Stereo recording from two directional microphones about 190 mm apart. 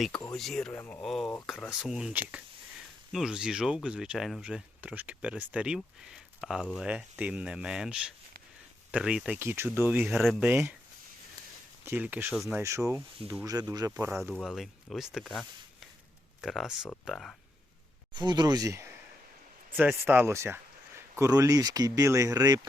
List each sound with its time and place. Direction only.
0.1 s speech: 20° left (ahead or behind)
0.3 s speech: centre (ahead or behind)
11.9 s speech: 10° right (ahead or behind)
14.1 s speech: centre (ahead or behind)
18.1 s speech: 25° right (ahead or behind)